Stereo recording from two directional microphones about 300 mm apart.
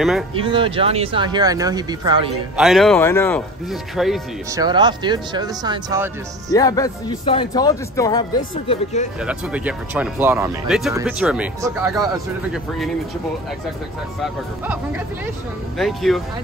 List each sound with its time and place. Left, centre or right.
0.3 s speech: centre
2.5 s speech: centre
4.6 s speech: centre
6.5 s a man's voice: centre
8.4 s speech: left
9.2 s speech: centre
15.8 s speech: centre